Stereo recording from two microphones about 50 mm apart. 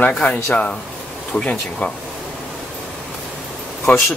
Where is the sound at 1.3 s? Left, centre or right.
Left.